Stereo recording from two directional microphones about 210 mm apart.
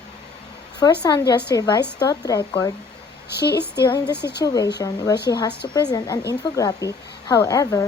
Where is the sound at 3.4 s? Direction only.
50° left (ahead or behind).